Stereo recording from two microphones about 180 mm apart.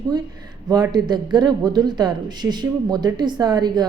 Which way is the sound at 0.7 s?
25° right (ahead or behind).